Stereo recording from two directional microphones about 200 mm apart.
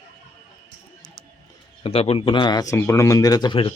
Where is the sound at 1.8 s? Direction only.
30° left (ahead or behind).